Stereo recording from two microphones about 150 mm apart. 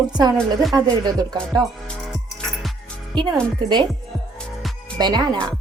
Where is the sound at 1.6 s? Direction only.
Centre (ahead or behind).